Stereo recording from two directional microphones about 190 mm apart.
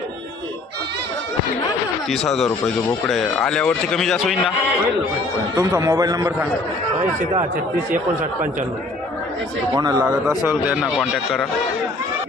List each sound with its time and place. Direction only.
2.0 s speech: centre (ahead or behind)
5.5 s a man's voice: 15° right (ahead or behind)
9.7 s a man's voice: 15° right (ahead or behind); by 11.4 s centre (ahead or behind)